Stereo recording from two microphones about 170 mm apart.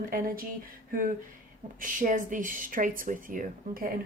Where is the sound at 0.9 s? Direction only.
55° right (ahead or behind).